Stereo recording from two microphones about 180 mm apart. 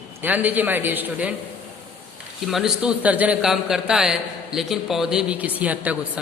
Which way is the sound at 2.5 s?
5° right (ahead or behind).